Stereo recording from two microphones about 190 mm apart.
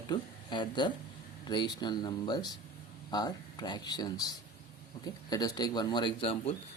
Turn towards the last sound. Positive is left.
turn(degrees=30)  # may be behind; listen again after turning